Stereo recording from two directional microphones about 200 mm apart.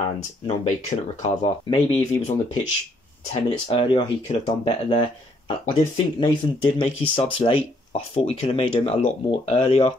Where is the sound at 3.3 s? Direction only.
25° left (ahead or behind).